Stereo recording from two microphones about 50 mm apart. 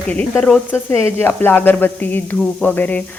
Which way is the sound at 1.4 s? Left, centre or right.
Left.